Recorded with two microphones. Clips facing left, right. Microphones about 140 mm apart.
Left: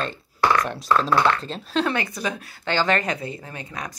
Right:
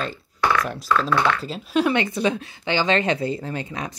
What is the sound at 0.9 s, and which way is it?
Speech, 35° left (ahead or behind).